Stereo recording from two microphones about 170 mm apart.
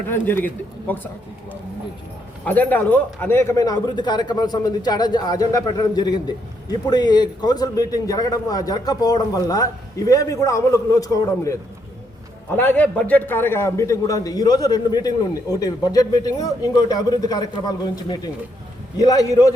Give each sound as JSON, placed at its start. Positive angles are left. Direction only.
{"t": 0.1, "sound": "a man's voice", "side_deg": 10}
{"t": 2.4, "sound": "a man's voice", "side_deg": 10}